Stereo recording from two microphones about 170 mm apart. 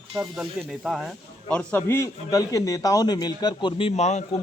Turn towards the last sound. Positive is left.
turn(degrees=40)  # may be behind; listen again after turning